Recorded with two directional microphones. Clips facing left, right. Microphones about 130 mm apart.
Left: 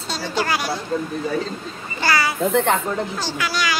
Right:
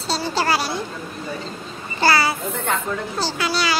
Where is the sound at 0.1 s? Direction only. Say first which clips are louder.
Right 2 dB; 30° right (ahead or behind).